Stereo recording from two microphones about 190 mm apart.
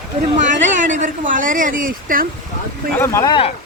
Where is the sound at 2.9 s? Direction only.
15° left (ahead or behind).